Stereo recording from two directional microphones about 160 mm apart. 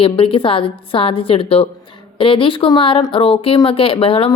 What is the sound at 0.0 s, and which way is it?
Speech, 35° left (ahead or behind).